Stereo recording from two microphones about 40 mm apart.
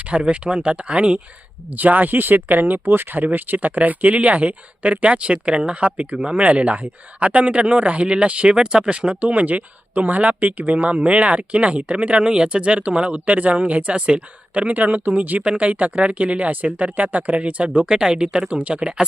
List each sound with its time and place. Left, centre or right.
0.0 s speech: right
1.7 s speech: right
14.7 s speech: right
17.8 s speech: centre